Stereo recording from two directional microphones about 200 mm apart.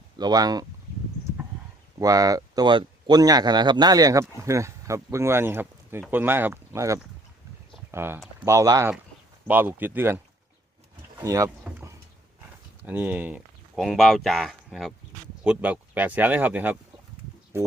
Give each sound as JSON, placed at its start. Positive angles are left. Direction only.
{"t": 0.2, "sound": "speech", "side_deg": -20}
{"t": 2.0, "sound": "speech", "side_deg": -15}
{"t": 11.2, "sound": "speech", "side_deg": -15}
{"t": 11.6, "sound": "a sound", "side_deg": -15}
{"t": 12.8, "sound": "speech", "side_deg": -10}